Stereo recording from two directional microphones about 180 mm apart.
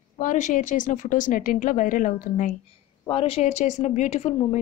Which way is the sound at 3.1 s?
30° left (ahead or behind).